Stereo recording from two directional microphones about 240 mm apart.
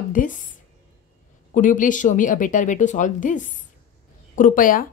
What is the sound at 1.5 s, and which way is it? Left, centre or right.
Speech, left.